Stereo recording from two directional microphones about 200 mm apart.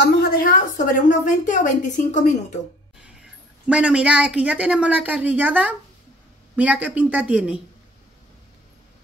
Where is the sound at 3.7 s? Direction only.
5° right (ahead or behind).